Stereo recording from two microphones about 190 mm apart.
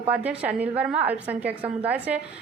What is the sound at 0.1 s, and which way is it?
A woman's voice, 10° right (ahead or behind).